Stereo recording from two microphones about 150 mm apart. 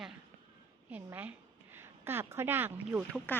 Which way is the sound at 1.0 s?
10° right (ahead or behind).